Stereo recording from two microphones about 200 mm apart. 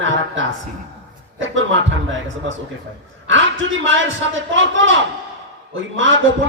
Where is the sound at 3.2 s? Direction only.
70° right (ahead or behind).